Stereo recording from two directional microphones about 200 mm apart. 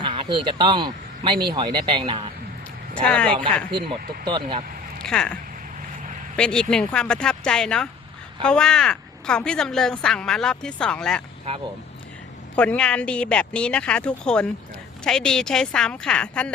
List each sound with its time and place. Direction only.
0.0 s speech: 25° right (ahead or behind)
2.9 s speech: 5° left (ahead or behind)
3.3 s speech: 25° right (ahead or behind)
3.8 s speech: 50° right (ahead or behind)
4.3 s speech: 25° right (ahead or behind)
5.0 s a woman's voice: 5° left (ahead or behind)
12.5 s a woman's voice: 5° left (ahead or behind)